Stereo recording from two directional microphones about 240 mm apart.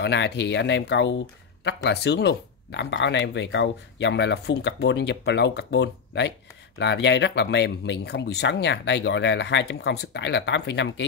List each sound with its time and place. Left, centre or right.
0.0 s speech: left